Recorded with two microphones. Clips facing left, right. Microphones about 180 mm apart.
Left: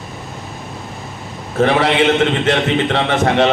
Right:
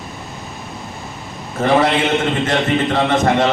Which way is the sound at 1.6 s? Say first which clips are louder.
Left 1 dB; 70° left (ahead or behind).